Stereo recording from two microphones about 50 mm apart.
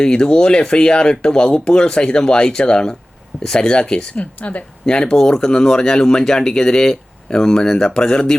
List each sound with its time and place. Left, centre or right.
0.0 s speech: centre
4.9 s speech: centre